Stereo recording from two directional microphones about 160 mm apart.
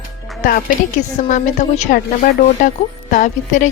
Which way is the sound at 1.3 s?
50° left (ahead or behind).